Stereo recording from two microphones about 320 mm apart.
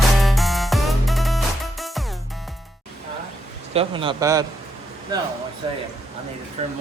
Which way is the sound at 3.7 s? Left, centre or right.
Centre.